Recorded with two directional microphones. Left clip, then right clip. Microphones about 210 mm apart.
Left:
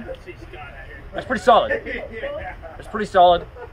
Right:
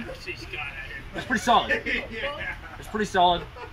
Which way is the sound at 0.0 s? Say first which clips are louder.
Left 1 dB; 20° left (ahead or behind).